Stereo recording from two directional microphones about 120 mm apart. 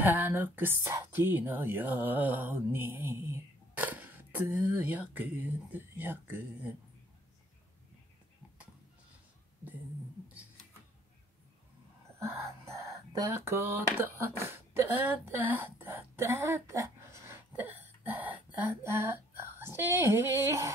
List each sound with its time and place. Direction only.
0.0 s speech: 15° right (ahead or behind)
12.2 s speech: 25° right (ahead or behind)
17.5 s speech: 15° right (ahead or behind)